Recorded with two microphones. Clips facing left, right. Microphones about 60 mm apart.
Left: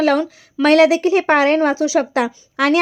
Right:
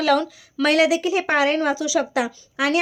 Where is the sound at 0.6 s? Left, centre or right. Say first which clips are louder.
Left 6 dB; left.